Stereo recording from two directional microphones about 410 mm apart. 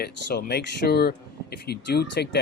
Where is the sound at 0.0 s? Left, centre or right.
Left.